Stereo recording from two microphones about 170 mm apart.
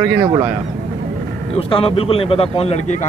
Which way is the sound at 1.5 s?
35° left (ahead or behind).